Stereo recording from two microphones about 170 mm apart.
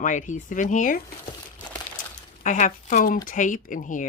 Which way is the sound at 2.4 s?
50° left (ahead or behind).